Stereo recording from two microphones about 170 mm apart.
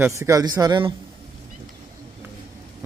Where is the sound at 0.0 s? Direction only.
15° right (ahead or behind).